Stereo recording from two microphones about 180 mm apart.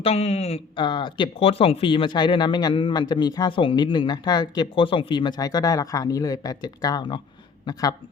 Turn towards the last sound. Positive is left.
turn(degrees=20)  # may be behind; listen again after turning